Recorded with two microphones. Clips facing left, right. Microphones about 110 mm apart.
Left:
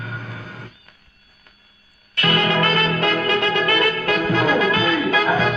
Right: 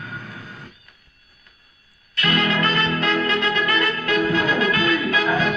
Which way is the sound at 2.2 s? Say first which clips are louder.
Left 2 dB; 30° left (ahead or behind).